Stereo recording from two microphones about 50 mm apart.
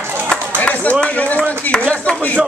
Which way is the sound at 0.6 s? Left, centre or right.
Left.